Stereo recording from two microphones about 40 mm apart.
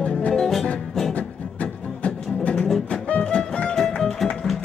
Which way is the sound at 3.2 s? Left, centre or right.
Left.